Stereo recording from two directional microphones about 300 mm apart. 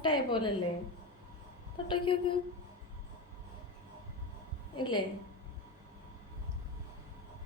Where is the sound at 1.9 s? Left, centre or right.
Centre.